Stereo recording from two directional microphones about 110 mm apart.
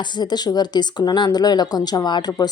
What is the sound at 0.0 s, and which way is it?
Speech, 40° left (ahead or behind).